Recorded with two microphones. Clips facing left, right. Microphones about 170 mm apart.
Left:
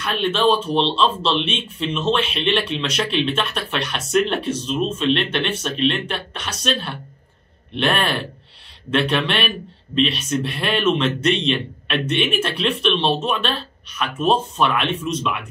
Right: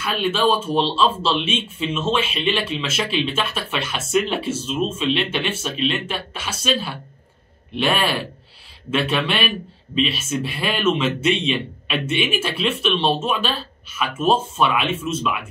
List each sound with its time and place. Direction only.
0.0 s speech: 5° right (ahead or behind)